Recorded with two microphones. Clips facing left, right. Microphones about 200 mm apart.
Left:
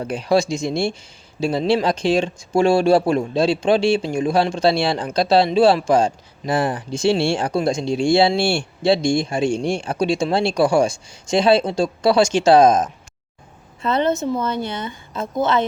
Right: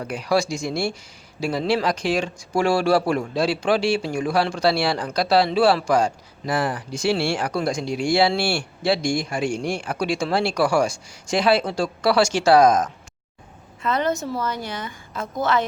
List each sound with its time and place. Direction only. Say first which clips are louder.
0.0 s speech: left 4 dB; 25° left (ahead or behind)